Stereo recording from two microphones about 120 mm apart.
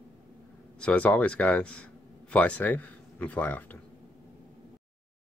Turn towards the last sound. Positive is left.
turn(degrees=15)  # may be behind; listen again after turning